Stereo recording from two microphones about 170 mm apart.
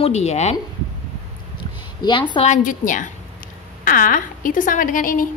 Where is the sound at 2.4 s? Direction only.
50° left (ahead or behind).